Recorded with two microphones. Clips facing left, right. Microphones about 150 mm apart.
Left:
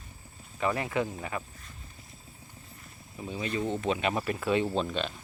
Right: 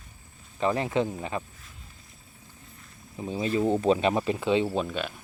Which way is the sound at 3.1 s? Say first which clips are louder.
Right 5 dB; 25° right (ahead or behind).